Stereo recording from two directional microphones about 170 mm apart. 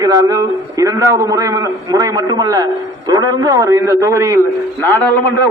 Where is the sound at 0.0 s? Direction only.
20° right (ahead or behind).